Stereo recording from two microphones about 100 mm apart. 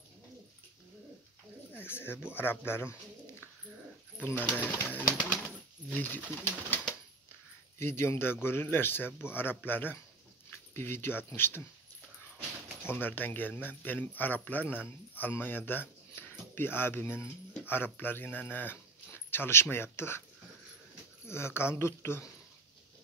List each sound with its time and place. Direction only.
1.7 s a sound: 20° left (ahead or behind)
2.3 s speech: 20° left (ahead or behind)
4.2 s speech: 20° left (ahead or behind)
7.8 s speech: 25° left (ahead or behind)
12.8 s speech: 20° left (ahead or behind)
21.3 s speech: 25° left (ahead or behind)